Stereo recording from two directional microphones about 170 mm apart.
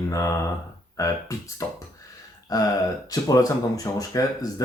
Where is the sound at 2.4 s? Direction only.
20° left (ahead or behind).